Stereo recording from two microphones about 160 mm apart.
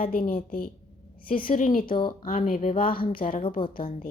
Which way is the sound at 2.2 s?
60° left (ahead or behind).